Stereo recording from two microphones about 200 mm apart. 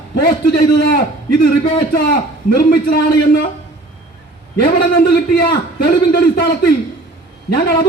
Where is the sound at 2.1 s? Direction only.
50° left (ahead or behind).